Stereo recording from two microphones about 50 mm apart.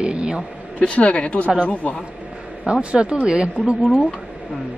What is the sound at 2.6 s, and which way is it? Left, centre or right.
Speech, right.